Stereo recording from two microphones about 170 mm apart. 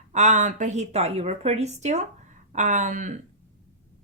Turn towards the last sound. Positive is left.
turn(degrees=-45)  # may be behind; listen again after turning